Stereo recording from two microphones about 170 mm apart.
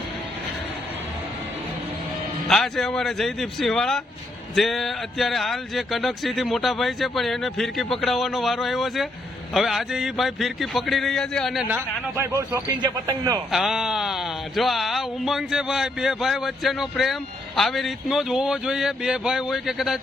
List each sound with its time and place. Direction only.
2.5 s speech: centre (ahead or behind)
11.7 s a man's voice: 15° right (ahead or behind)
13.5 s speech: centre (ahead or behind)